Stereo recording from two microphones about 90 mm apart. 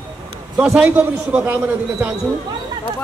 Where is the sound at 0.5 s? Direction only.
10° right (ahead or behind).